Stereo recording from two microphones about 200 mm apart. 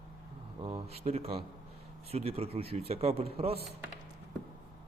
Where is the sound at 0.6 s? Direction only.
30° right (ahead or behind).